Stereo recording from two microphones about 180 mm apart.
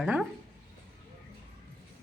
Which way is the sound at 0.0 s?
Centre (ahead or behind).